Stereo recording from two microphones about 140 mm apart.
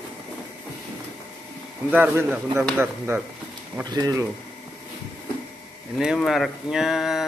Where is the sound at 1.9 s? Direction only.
15° right (ahead or behind).